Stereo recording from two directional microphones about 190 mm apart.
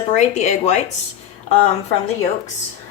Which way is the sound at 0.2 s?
40° left (ahead or behind).